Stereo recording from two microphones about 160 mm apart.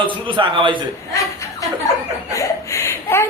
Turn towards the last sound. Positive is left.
turn(degrees=15)  # may be behind; listen again after turning